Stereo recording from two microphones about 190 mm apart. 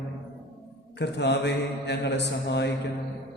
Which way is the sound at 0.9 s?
65° left (ahead or behind).